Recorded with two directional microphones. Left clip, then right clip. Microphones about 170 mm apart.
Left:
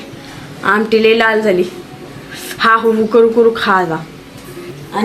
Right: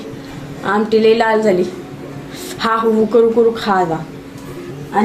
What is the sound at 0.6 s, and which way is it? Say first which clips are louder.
Speech: left 2 dB; 30° left (ahead or behind).